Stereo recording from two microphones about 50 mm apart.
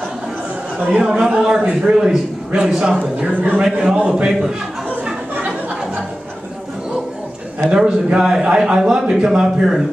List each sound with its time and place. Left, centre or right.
0.9 s a man's voice: centre
3.6 s a man's voice: centre
7.6 s a man's voice: centre